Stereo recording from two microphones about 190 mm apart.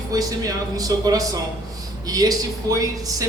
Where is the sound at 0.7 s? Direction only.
20° right (ahead or behind).